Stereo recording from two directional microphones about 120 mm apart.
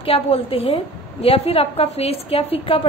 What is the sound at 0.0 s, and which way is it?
A woman's voice, 50° left (ahead or behind).